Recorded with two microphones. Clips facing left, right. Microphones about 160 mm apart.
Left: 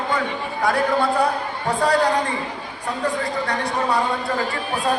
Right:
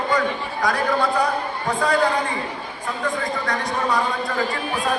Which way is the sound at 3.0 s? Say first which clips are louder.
Left 1 dB; 30° left (ahead or behind).